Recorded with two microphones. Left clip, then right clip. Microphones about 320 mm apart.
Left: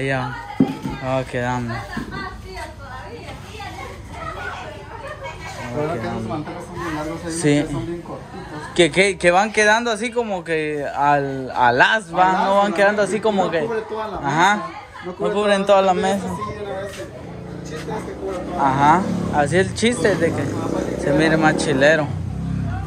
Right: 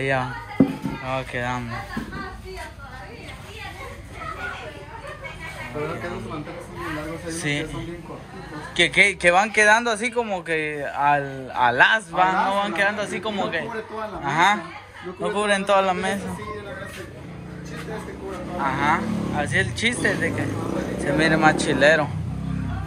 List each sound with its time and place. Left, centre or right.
0.0 s speech: centre
7.2 s speech: centre
18.6 s speech: centre